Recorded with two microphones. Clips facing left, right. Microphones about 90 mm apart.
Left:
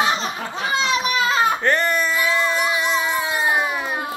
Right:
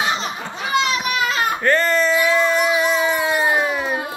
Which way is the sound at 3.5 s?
10° left (ahead or behind).